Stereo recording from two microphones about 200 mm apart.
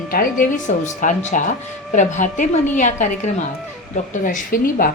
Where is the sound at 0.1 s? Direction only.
45° left (ahead or behind).